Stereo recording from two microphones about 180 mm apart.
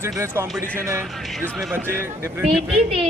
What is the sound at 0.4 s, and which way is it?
Speech, 15° right (ahead or behind).